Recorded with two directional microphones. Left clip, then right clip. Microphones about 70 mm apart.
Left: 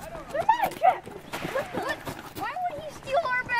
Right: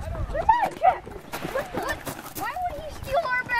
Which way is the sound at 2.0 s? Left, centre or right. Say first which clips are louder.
Right 2 dB; right.